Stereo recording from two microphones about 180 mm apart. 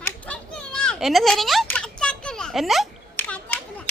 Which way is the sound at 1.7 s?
5° left (ahead or behind).